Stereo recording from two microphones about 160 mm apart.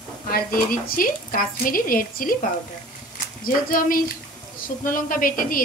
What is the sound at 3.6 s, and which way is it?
Speech, 60° left (ahead or behind).